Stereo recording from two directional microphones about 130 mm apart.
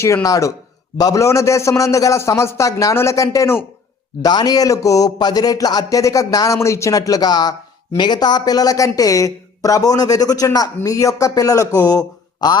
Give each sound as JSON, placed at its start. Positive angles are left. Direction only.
{"t": 0.0, "sound": "speech", "side_deg": 25}
{"t": 4.2, "sound": "speech", "side_deg": 30}